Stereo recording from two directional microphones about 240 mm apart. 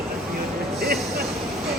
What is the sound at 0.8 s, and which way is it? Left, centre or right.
Music, right.